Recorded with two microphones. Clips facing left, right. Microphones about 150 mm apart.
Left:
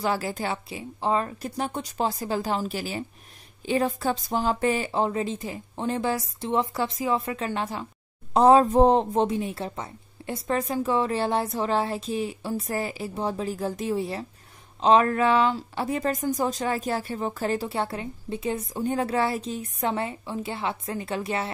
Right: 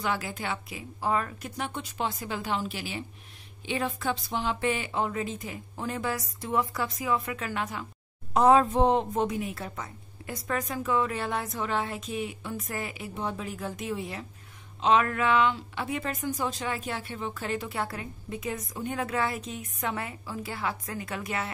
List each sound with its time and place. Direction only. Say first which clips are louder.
0.0 s speech: left 4 dB; 35° left (ahead or behind)